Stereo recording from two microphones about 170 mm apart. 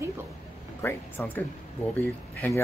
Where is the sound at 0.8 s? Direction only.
15° left (ahead or behind).